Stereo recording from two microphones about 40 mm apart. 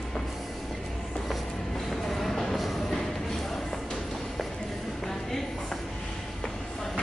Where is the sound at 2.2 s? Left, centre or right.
Centre.